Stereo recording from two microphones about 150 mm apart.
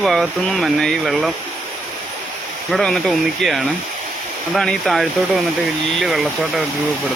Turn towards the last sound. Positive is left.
turn(degrees=-5)  # may be behind; listen again after turning